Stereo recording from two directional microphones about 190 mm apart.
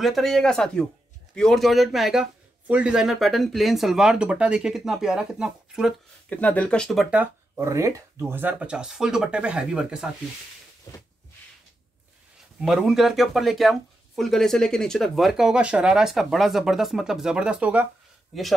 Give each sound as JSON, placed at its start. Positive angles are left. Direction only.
{"t": 0.0, "sound": "speech", "side_deg": 0}
{"t": 6.3, "sound": "speech", "side_deg": 10}
{"t": 10.9, "sound": "a sound", "side_deg": 20}
{"t": 12.6, "sound": "speech", "side_deg": 0}